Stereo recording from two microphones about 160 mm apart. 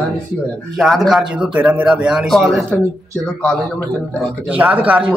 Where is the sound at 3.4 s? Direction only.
10° left (ahead or behind).